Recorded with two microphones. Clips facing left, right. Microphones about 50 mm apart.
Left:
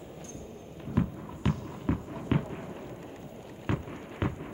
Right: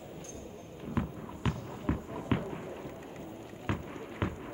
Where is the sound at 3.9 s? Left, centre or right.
Centre.